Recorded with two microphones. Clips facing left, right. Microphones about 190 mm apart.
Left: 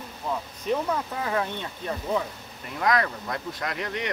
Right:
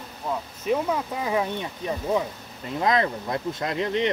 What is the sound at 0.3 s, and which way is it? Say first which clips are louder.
Speech: right 2 dB; 10° right (ahead or behind).